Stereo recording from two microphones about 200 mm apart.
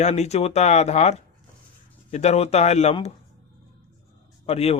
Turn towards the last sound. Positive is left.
turn(degrees=30)  # may be behind; listen again after turning